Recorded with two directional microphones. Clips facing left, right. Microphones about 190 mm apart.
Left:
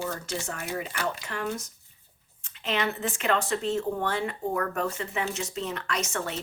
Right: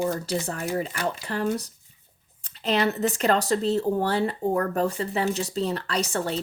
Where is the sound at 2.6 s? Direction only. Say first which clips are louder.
Right 6 dB; 40° right (ahead or behind).